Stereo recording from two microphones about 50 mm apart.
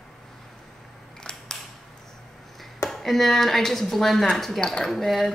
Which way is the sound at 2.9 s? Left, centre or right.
Centre.